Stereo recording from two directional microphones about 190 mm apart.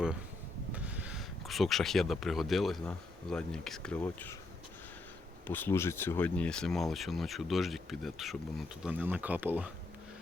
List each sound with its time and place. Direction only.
0.7 s speech: 5° right (ahead or behind); by 4.4 s 10° left (ahead or behind)
5.5 s speech: 10° left (ahead or behind); by 9.7 s 10° right (ahead or behind)